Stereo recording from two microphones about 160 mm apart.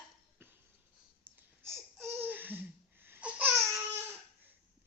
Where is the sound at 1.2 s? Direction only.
15° right (ahead or behind).